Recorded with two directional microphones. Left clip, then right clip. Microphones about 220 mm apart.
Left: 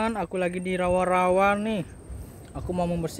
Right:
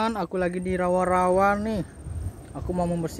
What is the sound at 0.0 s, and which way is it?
A man's voice, 10° right (ahead or behind).